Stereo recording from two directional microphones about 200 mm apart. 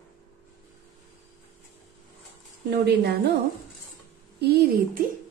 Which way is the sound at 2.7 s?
55° right (ahead or behind).